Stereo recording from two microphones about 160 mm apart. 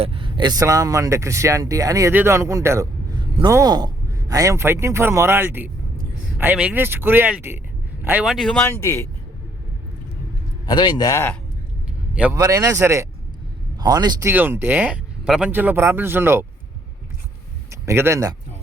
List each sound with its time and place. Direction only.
0.0 s a man's voice: 35° right (ahead or behind); by 8.5 s centre (ahead or behind)
8.5 s speech: 15° left (ahead or behind)
10.7 s speech: 25° left (ahead or behind)
12.1 s a man's voice: 10° right (ahead or behind)
12.4 s speech: 20° right (ahead or behind)
17.7 s speech: 15° right (ahead or behind)